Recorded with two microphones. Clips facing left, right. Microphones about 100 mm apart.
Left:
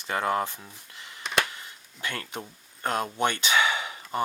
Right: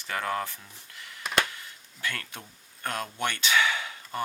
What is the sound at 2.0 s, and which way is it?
Speech, 20° left (ahead or behind).